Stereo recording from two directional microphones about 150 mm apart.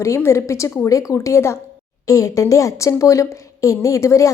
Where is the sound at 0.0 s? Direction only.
20° left (ahead or behind).